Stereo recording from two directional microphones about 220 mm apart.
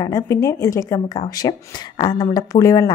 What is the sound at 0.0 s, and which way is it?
A woman's voice, 15° left (ahead or behind).